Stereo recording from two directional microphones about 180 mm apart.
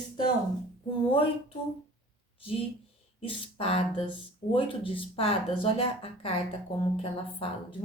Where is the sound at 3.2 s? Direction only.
30° left (ahead or behind).